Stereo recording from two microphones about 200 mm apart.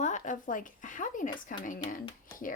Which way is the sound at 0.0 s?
40° left (ahead or behind).